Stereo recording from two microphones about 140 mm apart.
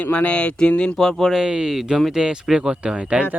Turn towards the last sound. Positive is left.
turn(degrees=-10)  # may be behind; listen again after turning